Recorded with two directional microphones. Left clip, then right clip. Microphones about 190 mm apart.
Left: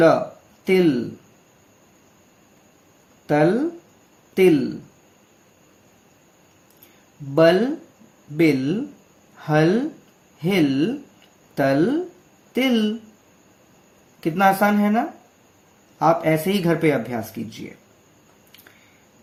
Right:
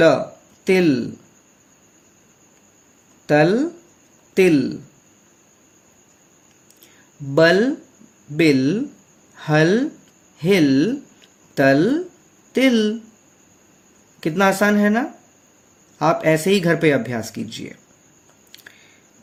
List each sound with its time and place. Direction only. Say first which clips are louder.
0.6 s speech: right 1 dB; 50° right (ahead or behind)
3.2 s speech: right 3 dB; 50° right (ahead or behind)
7.3 s speech: right 1 dB; 50° right (ahead or behind)
14.2 s speech: even; 50° right (ahead or behind)